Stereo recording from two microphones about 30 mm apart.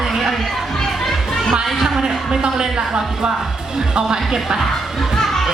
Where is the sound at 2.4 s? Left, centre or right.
Right.